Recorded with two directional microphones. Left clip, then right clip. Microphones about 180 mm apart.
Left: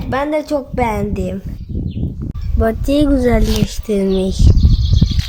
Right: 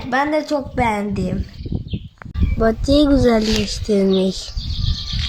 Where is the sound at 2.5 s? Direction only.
15° left (ahead or behind).